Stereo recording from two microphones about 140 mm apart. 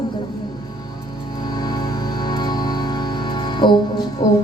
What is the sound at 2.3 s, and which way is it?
Music, 30° left (ahead or behind).